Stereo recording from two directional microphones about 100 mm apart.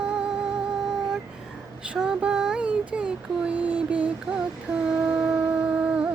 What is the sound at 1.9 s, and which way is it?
Child singing, 5° right (ahead or behind).